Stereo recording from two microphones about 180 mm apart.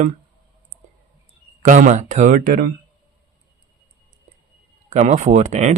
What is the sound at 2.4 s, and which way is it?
Speech, 60° right (ahead or behind).